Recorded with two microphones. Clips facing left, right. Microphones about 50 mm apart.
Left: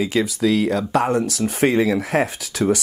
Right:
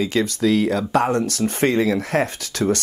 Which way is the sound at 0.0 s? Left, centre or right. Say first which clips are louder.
Even; centre.